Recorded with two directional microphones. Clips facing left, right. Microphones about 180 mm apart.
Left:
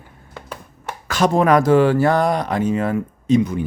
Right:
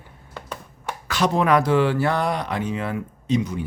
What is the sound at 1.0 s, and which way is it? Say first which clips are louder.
Speech: left 4 dB; 45° left (ahead or behind).